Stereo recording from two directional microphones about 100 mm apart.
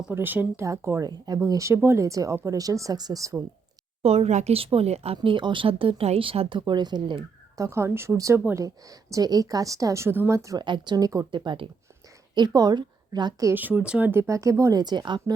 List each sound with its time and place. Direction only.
0.1 s a woman's voice: 20° right (ahead or behind); by 3.3 s 35° right (ahead or behind)
4.0 s speech: 90° right
5.1 s speech: 55° right (ahead or behind)
7.5 s a woman's voice: 30° right (ahead or behind)
10.6 s a woman's voice: 50° right (ahead or behind)
11.3 s speech: 50° right (ahead or behind)
12.3 s a woman's voice: 45° right (ahead or behind)
13.5 s speech: 15° right (ahead or behind)
14.1 s a woman's voice: 30° right (ahead or behind); by 15.4 s 50° right (ahead or behind)